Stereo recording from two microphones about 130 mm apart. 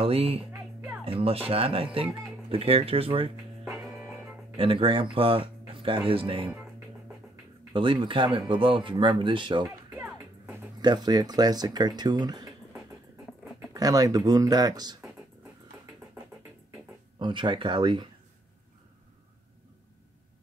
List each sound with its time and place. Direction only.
0.0 s speech: 50° right (ahead or behind)
0.5 s music: 15° right (ahead or behind)
1.0 s speech: 45° right (ahead or behind)
3.8 s music: centre (ahead or behind)
4.6 s speech: 40° right (ahead or behind)
7.7 s speech: 40° right (ahead or behind)
13.7 s speech: 30° right (ahead or behind)
17.2 s speech: 40° right (ahead or behind)